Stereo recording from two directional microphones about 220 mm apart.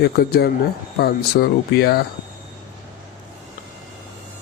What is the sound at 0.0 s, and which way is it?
Speech, 45° left (ahead or behind).